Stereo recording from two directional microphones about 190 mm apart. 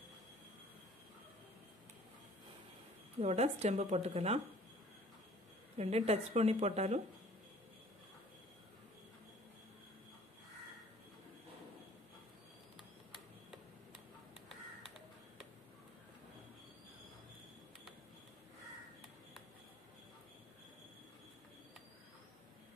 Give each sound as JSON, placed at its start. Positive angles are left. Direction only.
{"t": 3.2, "sound": "speech", "side_deg": -35}
{"t": 5.8, "sound": "speech", "side_deg": -35}